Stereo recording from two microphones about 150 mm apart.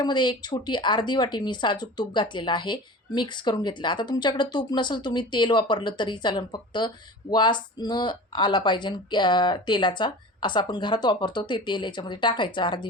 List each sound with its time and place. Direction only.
0.0 s a woman's voice: 30° left (ahead or behind)